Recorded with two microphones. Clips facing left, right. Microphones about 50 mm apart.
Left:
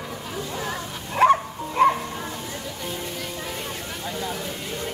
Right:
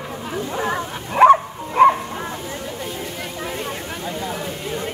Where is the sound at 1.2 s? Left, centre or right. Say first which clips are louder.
Right 6 dB; centre.